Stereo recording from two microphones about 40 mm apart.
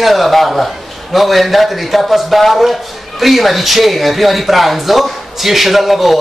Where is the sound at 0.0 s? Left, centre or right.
Centre.